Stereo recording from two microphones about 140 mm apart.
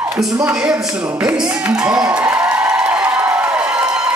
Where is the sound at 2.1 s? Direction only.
15° right (ahead or behind).